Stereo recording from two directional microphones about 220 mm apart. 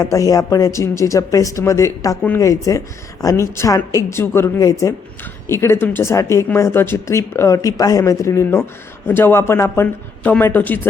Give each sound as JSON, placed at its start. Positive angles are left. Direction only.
{"t": 0.0, "sound": "speech", "side_deg": 15}